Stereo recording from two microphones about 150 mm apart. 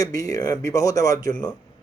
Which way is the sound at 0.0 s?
25° left (ahead or behind).